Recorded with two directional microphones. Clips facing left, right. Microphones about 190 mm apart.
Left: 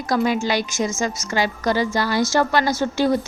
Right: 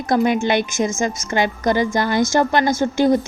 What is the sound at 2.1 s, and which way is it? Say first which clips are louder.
Speech: right 2 dB; 50° right (ahead or behind).